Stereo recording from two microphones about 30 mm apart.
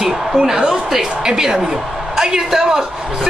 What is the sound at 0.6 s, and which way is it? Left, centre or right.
A man's voice, right.